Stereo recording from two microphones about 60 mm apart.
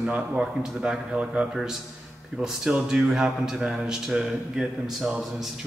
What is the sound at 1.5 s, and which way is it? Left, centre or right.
A man's voice, centre.